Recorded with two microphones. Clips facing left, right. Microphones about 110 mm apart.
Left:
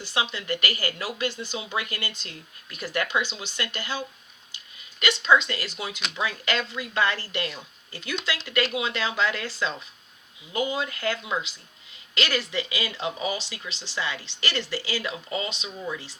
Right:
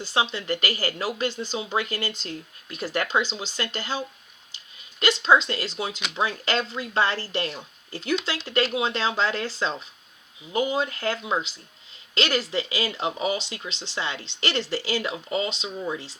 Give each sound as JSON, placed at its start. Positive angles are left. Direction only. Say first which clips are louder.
{"t": 0.0, "sound": "speech", "louder": "right 3 dB", "side_deg": -30}